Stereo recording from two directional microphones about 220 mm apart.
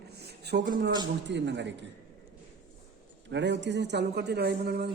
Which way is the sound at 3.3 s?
55° right (ahead or behind).